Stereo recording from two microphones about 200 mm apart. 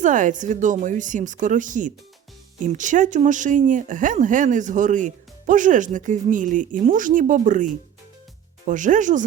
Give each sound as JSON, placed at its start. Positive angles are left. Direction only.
{"t": 0.0, "sound": "speech", "side_deg": -40}